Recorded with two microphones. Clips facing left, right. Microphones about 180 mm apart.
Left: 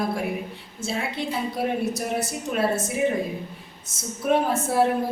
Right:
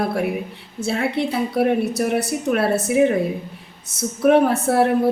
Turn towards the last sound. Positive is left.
turn(degrees=-65)  # may be behind; listen again after turning